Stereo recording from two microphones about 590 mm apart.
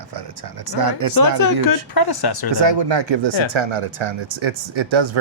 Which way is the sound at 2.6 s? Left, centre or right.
Right.